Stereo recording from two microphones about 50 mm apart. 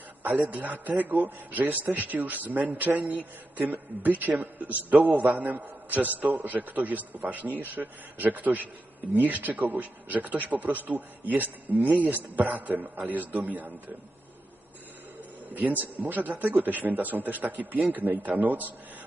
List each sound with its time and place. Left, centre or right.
0.2 s a sound: right
0.4 s a man's voice: right
15.7 s a man's voice: right